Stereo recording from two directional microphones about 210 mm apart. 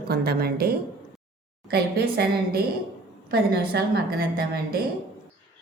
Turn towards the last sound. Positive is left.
turn(degrees=-45)  # may be behind; listen again after turning